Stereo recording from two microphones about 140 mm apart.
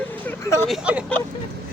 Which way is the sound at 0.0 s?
15° left (ahead or behind).